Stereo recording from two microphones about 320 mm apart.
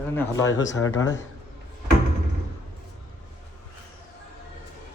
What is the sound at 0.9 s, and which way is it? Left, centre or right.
Speech, left.